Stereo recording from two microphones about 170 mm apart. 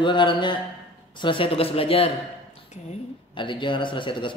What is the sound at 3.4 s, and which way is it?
Speech, 30° left (ahead or behind).